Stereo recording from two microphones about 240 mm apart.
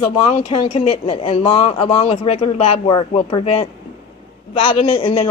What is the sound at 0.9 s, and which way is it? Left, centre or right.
Speech, left.